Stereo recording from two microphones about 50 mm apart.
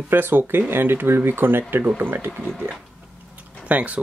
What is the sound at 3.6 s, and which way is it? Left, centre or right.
Speech, right.